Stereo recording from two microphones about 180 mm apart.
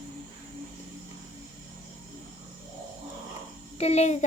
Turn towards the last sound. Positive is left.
turn(degrees=35)  # may be behind; listen again after turning